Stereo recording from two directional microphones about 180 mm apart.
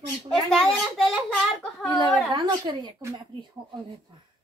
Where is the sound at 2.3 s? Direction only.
25° right (ahead or behind).